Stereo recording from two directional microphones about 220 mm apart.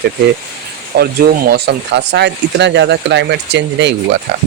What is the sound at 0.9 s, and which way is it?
Speech, 45° right (ahead or behind).